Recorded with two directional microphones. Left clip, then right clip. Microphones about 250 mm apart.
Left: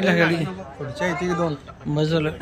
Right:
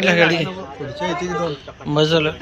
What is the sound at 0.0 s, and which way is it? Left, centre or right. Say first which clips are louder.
Speech: right 5 dB; centre.